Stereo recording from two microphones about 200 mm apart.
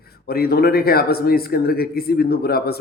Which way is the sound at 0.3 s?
50° left (ahead or behind).